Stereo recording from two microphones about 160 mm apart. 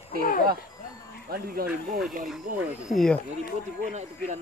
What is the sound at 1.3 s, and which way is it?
Speech, 70° right (ahead or behind).